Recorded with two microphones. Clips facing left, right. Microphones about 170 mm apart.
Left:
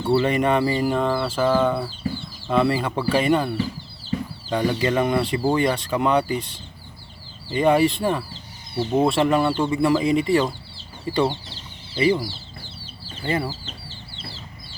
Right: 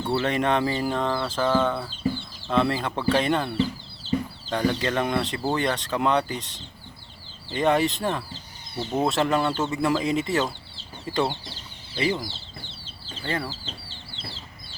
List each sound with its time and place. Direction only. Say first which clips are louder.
0.0 s speech: left 5 dB; 5° left (ahead or behind)
7.5 s speech: left 4 dB; 5° left (ahead or behind)